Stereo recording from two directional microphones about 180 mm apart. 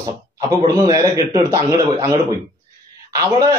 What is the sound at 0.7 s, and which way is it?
A man's voice, 20° right (ahead or behind).